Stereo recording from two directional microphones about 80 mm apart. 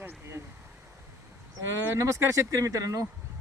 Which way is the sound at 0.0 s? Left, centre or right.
Right.